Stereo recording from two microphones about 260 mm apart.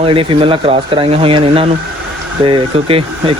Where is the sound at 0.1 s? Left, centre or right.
Right.